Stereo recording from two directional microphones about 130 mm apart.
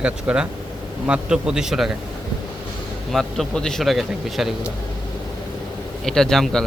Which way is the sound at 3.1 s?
Centre (ahead or behind).